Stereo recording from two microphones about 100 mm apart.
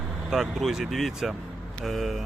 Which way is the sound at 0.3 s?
5° right (ahead or behind).